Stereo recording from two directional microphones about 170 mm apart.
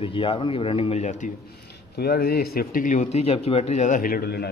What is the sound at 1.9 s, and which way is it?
Speech, 65° left (ahead or behind).